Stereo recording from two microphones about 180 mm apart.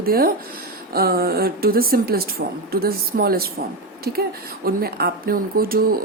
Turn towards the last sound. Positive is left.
turn(degrees=-55)  # may be behind; listen again after turning